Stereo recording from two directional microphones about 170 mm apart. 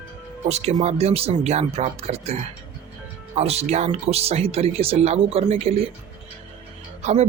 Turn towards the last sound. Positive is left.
turn(degrees=-40)  # may be behind; listen again after turning